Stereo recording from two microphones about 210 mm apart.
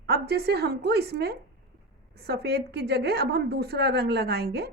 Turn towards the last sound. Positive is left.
turn(degrees=-50)  # may be behind; listen again after turning